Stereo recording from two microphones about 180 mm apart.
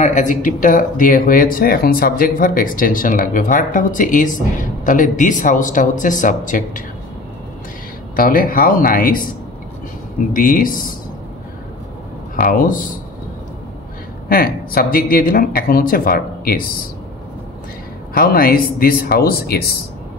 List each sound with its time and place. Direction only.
0.0 s speech: 45° left (ahead or behind)
8.2 s speech: 50° left (ahead or behind)
10.3 s speech: 50° left (ahead or behind)
12.4 s speech: 50° left (ahead or behind)
14.3 s speech: 55° left (ahead or behind)
18.1 s speech: 55° left (ahead or behind)